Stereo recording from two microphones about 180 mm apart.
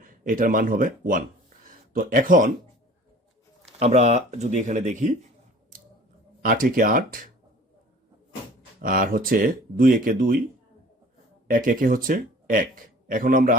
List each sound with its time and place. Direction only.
0.0 s speech: 50° right (ahead or behind)
3.8 s speech: 40° right (ahead or behind)
6.4 s speech: 50° right (ahead or behind)
8.8 s speech: 50° right (ahead or behind)
11.4 s speech: 50° right (ahead or behind)